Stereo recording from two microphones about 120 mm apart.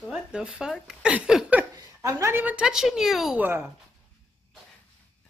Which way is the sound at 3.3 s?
15° right (ahead or behind).